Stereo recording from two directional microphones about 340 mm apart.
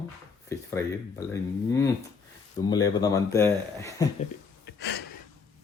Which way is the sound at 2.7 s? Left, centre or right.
Centre.